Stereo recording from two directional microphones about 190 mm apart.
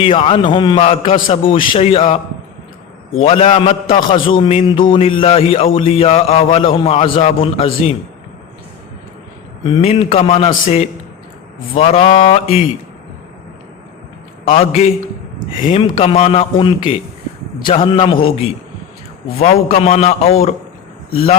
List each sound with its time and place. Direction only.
0.0 s a man's voice: 30° left (ahead or behind)
9.6 s speech: 30° left (ahead or behind)
14.4 s a man's voice: 35° left (ahead or behind)
19.4 s speech: 35° left (ahead or behind)